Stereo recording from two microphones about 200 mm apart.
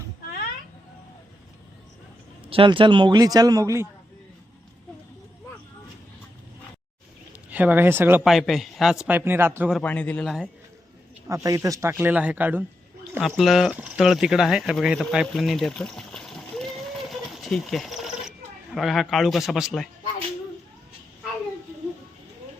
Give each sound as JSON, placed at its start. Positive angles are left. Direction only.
{"t": 2.5, "sound": "a man's voice", "side_deg": -25}
{"t": 7.5, "sound": "speech", "side_deg": -10}
{"t": 9.7, "sound": "a man's voice", "side_deg": 5}
{"t": 11.4, "sound": "a man's voice", "side_deg": -15}